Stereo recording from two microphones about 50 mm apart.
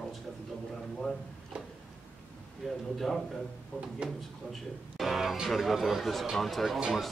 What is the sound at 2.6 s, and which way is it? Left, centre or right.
Speech, centre.